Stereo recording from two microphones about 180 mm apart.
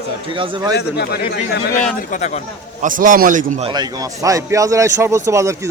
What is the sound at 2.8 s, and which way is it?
Speech, 45° right (ahead or behind).